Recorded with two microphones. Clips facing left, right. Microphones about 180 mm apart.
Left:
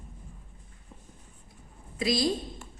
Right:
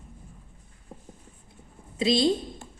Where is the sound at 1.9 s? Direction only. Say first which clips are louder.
Right 4 dB; 25° right (ahead or behind).